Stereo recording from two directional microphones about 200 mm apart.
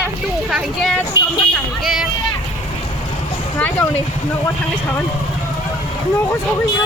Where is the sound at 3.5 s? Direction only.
10° left (ahead or behind).